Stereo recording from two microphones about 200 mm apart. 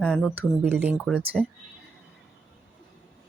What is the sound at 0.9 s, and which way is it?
Speech, centre (ahead or behind).